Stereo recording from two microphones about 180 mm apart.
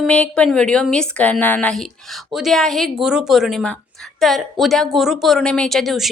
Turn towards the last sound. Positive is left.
turn(degrees=0)  # may be behind; listen again after turning